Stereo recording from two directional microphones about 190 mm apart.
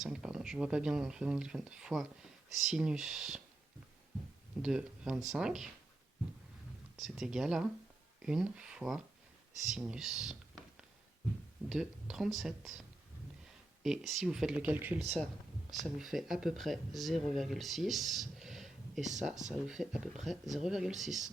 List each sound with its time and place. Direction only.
0.0 s speech: 5° right (ahead or behind)
4.6 s speech: 5° right (ahead or behind)
6.9 s speech: centre (ahead or behind)
9.7 s a sound: 5° right (ahead or behind)
11.7 s speech: centre (ahead or behind)
13.8 s speech: centre (ahead or behind)
14.9 s speech: 35° right (ahead or behind)
15.7 s speech: centre (ahead or behind)
19.3 s speech: 40° right (ahead or behind)
19.5 s speech: centre (ahead or behind)